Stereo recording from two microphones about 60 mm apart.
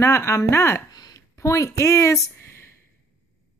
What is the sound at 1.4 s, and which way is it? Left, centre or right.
Speech, left.